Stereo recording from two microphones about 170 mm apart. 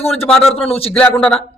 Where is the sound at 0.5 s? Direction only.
35° left (ahead or behind).